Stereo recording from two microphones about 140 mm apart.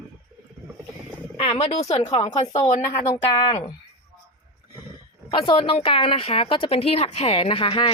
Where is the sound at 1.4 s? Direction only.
45° left (ahead or behind).